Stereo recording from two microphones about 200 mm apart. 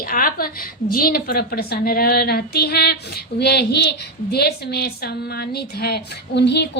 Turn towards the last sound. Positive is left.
turn(degrees=60)  # may be behind; listen again after turning